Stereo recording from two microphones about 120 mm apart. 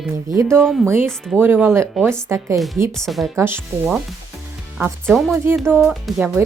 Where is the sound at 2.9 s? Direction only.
Centre (ahead or behind).